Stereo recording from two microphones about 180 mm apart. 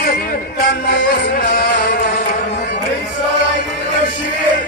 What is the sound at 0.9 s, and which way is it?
Music, 55° left (ahead or behind).